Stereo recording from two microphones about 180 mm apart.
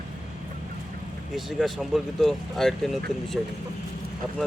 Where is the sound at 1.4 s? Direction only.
Centre (ahead or behind).